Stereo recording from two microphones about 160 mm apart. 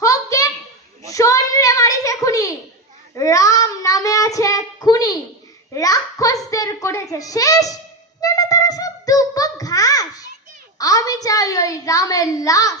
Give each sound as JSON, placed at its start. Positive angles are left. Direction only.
{"t": 0.0, "sound": "a sound", "side_deg": 20}
{"t": 3.2, "sound": "a child's voice", "side_deg": 20}
{"t": 8.2, "sound": "music", "side_deg": 20}
{"t": 10.8, "sound": "a child's voice", "side_deg": 20}